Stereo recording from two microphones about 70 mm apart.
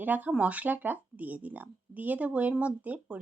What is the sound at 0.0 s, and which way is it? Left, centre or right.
Speech, right.